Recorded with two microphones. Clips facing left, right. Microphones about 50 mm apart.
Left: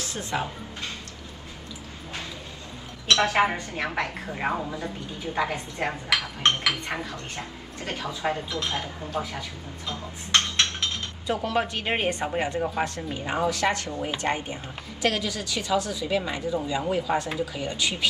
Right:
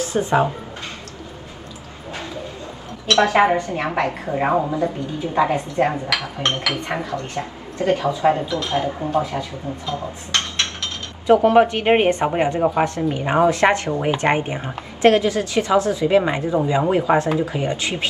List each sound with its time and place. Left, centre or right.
0.0 s speech: right
3.1 s speech: right
11.4 s speech: right